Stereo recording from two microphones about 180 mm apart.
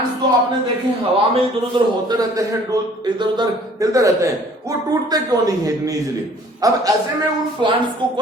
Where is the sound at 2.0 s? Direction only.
20° right (ahead or behind).